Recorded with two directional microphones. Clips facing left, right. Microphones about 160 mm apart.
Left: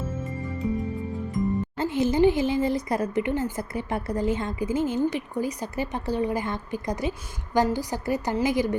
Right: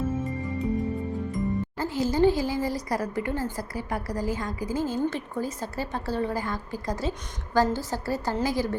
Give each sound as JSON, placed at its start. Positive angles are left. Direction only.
{"t": 1.8, "sound": "a woman's voice", "side_deg": 20}